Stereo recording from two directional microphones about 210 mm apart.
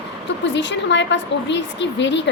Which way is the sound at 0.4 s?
60° left (ahead or behind).